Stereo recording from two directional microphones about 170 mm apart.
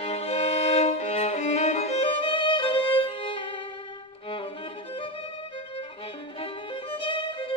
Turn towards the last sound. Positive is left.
turn(degrees=30)  # may be behind; listen again after turning